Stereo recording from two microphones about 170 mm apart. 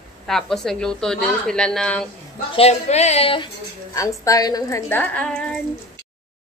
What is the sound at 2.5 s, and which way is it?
Speech, 40° left (ahead or behind).